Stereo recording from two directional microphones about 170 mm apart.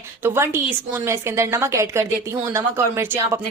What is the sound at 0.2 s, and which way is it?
A woman's voice, 15° right (ahead or behind).